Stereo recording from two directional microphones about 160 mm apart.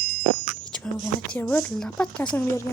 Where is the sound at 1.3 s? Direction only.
10° left (ahead or behind).